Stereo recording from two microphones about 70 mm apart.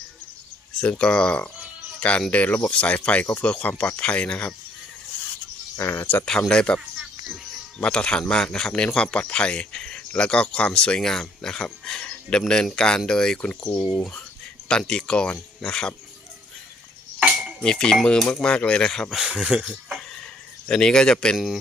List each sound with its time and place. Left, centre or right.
0.7 s speech: centre
5.7 s speech: left
6.5 s speech: centre
7.8 s speech: centre
17.6 s speech: centre
18.2 s cutlery: centre
18.4 s speech: centre
19.4 s speech: centre
20.7 s speech: centre
21.3 s cutlery: centre